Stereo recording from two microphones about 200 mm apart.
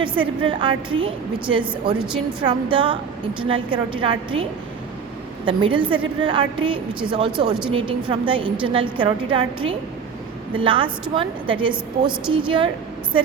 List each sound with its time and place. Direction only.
0.0 s a woman's voice: 25° right (ahead or behind)
5.5 s a woman's voice: 25° right (ahead or behind)
10.6 s a woman's voice: 25° right (ahead or behind)